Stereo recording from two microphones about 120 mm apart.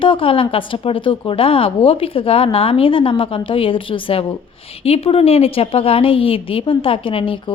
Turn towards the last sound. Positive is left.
turn(degrees=45)  # may be behind; listen again after turning